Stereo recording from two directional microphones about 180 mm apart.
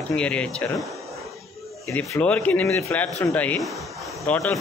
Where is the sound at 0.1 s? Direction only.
5° left (ahead or behind).